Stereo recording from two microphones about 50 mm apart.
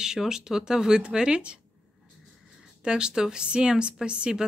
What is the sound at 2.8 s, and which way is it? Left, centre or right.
A woman's voice, centre.